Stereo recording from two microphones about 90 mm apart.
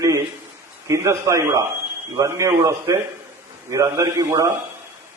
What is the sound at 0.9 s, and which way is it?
A man's voice, 35° right (ahead or behind).